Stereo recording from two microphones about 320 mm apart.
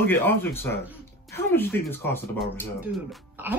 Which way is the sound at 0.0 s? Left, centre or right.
Centre.